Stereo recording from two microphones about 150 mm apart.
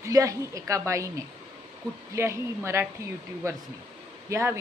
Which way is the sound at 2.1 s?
15° right (ahead or behind).